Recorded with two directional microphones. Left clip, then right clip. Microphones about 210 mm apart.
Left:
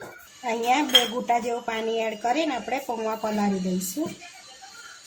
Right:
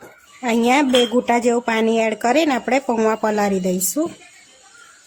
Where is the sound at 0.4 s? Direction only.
55° right (ahead or behind).